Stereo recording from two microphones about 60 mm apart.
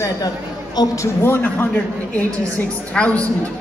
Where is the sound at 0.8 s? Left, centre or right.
Left.